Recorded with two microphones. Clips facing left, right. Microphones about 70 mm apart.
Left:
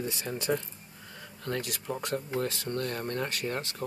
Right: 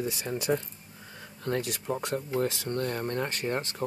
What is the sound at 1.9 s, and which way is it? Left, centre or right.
Speech, centre.